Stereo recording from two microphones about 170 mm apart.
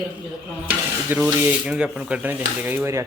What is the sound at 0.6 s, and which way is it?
Stir, 10° right (ahead or behind).